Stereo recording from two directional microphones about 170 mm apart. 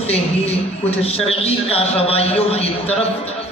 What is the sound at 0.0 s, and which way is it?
A man's voice, 35° left (ahead or behind).